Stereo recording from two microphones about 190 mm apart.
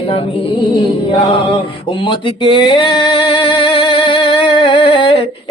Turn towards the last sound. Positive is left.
turn(degrees=25)  # may be behind; listen again after turning